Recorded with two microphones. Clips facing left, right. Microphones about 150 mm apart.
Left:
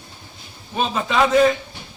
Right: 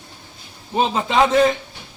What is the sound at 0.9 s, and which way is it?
Speech, 25° right (ahead or behind).